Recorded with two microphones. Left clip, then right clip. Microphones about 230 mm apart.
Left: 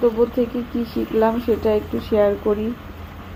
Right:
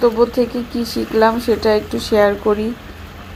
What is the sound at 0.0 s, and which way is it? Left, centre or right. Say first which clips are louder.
Speech: right 4 dB; right.